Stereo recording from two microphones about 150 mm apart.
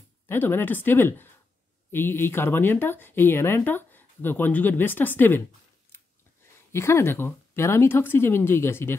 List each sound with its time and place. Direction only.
0.3 s speech: 15° left (ahead or behind)
6.7 s speech: 15° left (ahead or behind)